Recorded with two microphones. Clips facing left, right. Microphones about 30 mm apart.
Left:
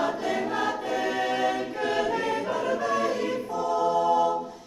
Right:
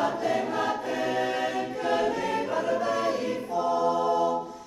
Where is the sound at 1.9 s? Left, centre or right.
Centre.